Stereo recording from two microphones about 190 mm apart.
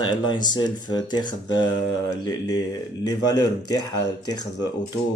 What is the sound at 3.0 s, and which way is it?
Speech, 20° left (ahead or behind).